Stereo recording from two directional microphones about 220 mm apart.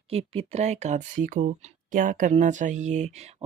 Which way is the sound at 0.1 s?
25° right (ahead or behind).